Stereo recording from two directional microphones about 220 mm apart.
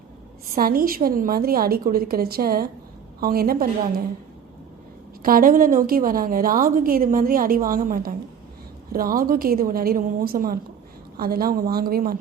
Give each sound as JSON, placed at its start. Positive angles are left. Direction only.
{"t": 0.5, "sound": "a woman's voice", "side_deg": -40}
{"t": 5.2, "sound": "a woman's voice", "side_deg": -40}